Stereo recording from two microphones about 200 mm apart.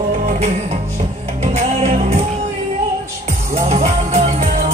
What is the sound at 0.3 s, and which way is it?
Music, 35° right (ahead or behind).